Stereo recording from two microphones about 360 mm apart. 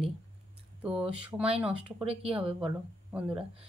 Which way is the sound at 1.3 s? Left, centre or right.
Centre.